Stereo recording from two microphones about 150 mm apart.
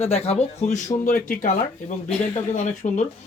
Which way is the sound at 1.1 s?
65° left (ahead or behind).